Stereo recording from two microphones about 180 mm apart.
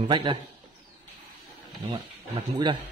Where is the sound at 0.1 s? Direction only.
30° right (ahead or behind).